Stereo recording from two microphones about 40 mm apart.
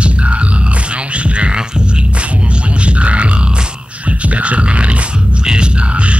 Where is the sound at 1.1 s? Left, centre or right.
Right.